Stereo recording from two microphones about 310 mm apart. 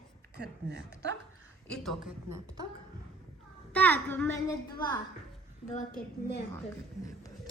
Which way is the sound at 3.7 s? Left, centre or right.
Centre.